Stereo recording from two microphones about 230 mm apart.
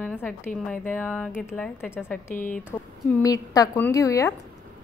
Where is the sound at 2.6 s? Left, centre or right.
Centre.